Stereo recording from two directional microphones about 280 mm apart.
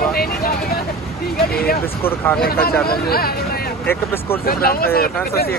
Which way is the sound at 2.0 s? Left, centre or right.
Centre.